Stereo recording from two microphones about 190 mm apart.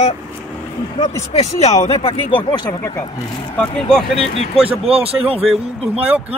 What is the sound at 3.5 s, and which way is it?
Speech, 5° left (ahead or behind).